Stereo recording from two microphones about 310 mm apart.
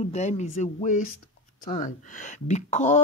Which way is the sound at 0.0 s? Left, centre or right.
Left.